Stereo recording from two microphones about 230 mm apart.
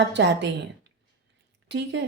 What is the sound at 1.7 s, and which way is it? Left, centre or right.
Speech, right.